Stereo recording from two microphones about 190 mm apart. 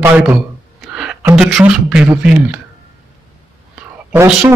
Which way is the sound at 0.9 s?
5° right (ahead or behind).